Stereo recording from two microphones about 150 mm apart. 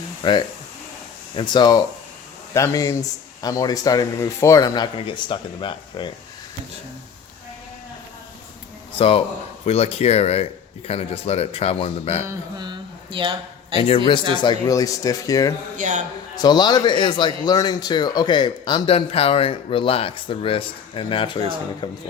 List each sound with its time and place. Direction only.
0.2 s speech: 30° left (ahead or behind)
9.0 s speech: 40° left (ahead or behind)
12.2 s mantra: 20° right (ahead or behind)
12.6 s a sound: 30° right (ahead or behind)
13.7 s speech: 40° left (ahead or behind)
14.4 s speech: 25° left (ahead or behind)
15.8 s a man's voice: 55° right (ahead or behind)
16.3 s speech: 30° left (ahead or behind)